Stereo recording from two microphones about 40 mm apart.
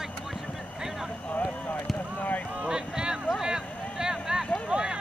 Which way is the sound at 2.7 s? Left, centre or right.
Centre.